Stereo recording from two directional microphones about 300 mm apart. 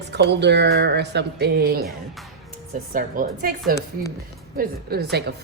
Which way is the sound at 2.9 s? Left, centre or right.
Right.